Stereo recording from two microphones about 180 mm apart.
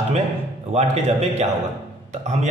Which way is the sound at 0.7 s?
40° right (ahead or behind).